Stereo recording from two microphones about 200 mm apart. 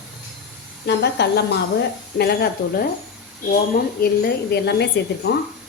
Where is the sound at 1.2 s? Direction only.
55° left (ahead or behind).